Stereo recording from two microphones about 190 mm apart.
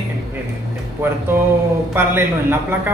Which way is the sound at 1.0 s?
10° right (ahead or behind).